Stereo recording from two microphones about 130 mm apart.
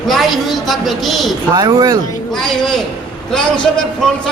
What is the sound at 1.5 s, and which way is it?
Speech, 30° right (ahead or behind).